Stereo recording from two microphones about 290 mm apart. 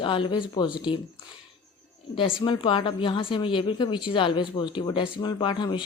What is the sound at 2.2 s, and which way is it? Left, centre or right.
Speech, centre.